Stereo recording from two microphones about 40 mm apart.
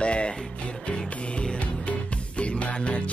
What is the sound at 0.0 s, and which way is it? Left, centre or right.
Music, left.